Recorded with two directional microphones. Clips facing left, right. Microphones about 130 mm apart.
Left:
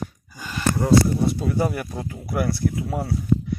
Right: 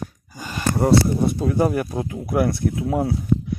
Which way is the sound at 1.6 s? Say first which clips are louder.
Right 4 dB; 40° right (ahead or behind).